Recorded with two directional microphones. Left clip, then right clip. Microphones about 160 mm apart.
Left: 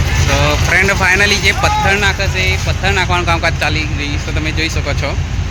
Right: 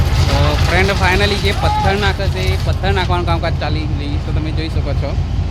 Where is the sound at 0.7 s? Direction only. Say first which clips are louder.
Left 4 dB; centre (ahead or behind).